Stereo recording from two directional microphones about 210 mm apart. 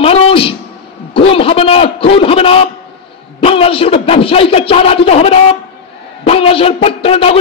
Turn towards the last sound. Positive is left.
turn(degrees=30)  # may be behind; listen again after turning